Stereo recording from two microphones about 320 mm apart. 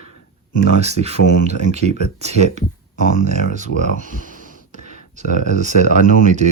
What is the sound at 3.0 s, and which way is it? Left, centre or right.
Speech, left.